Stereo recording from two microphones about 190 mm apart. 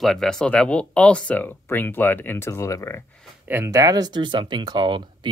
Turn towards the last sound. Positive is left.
turn(degrees=-25)  # may be behind; listen again after turning